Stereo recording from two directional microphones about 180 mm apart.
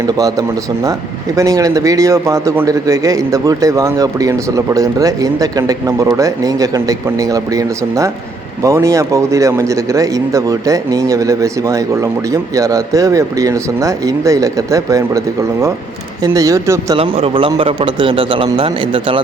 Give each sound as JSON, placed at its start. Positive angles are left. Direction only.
{"t": 0.2, "sound": "a man's voice", "side_deg": -20}
{"t": 16.2, "sound": "speech", "side_deg": -20}
{"t": 17.0, "sound": "a man's voice", "side_deg": -30}